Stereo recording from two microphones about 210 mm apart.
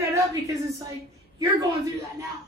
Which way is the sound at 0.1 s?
15° right (ahead or behind).